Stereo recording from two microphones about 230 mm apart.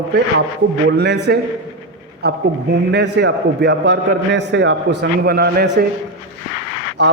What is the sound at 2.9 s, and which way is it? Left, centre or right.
A man's voice, right.